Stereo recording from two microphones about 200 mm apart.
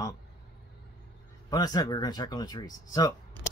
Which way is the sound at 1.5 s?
20° left (ahead or behind).